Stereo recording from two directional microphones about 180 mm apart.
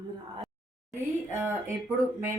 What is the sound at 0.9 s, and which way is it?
Speech, 10° right (ahead or behind).